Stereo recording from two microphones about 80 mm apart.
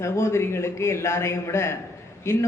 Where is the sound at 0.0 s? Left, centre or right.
Left.